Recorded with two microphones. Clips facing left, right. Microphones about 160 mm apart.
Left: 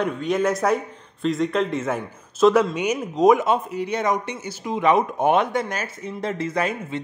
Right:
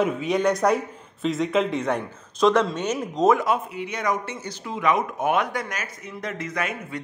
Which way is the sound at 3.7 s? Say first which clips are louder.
Left 4 dB; 30° left (ahead or behind).